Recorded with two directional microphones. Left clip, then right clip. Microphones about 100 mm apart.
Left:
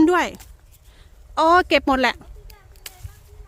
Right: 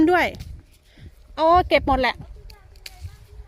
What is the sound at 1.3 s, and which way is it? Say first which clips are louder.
Speech: left 1 dB; 55° left (ahead or behind).